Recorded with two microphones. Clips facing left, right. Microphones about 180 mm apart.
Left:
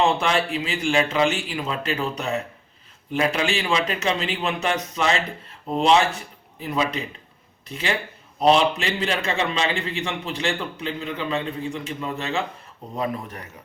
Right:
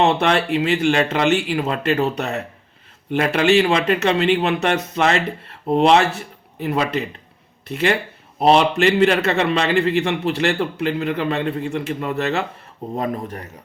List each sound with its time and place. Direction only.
0.0 s a man's voice: 65° right (ahead or behind)
13.0 s speech: 40° right (ahead or behind)